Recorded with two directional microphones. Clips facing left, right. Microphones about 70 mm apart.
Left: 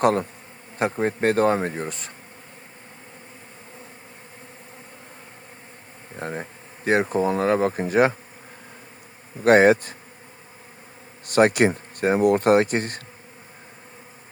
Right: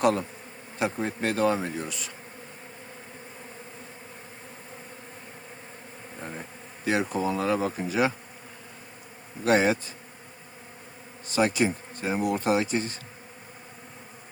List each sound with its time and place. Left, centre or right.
0.0 s speech: left
6.1 s bee: left
6.8 s speech: left
9.4 s speech: left
11.3 s speech: left